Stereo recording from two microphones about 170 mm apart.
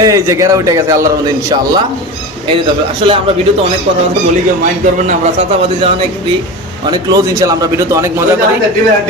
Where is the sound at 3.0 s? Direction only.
30° right (ahead or behind).